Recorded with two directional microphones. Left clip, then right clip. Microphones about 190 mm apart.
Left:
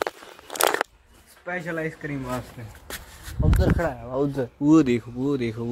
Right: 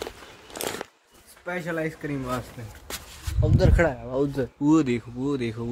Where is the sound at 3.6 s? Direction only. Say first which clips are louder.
Right 3 dB; 55° right (ahead or behind).